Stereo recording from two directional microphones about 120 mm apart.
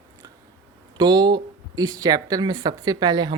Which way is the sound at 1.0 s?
40° right (ahead or behind).